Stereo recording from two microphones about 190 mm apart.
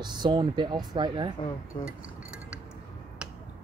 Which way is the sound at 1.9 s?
5° right (ahead or behind).